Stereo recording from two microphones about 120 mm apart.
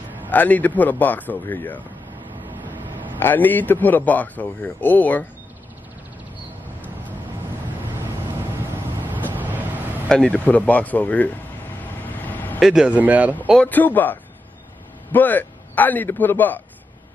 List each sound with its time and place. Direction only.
0.3 s speech: 15° left (ahead or behind)
2.7 s vehicle: 15° right (ahead or behind)
3.2 s speech: 15° left (ahead or behind)
9.0 s vehicle: 15° right (ahead or behind)
10.0 s speech: 10° left (ahead or behind)
12.2 s vehicle: 15° left (ahead or behind)
12.5 s speech: 5° right (ahead or behind)
13.6 s speech: 15° left (ahead or behind)
15.1 s a man's voice: 15° left (ahead or behind)